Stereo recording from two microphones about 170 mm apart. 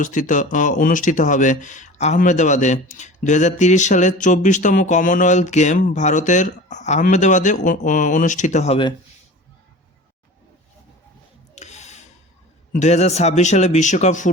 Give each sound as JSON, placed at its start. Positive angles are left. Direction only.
{"t": 0.0, "sound": "speech", "side_deg": 50}
{"t": 11.5, "sound": "a sound", "side_deg": 40}
{"t": 12.7, "sound": "speech", "side_deg": 40}